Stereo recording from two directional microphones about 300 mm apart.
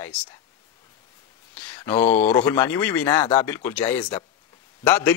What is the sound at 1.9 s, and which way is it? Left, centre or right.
Speech, centre.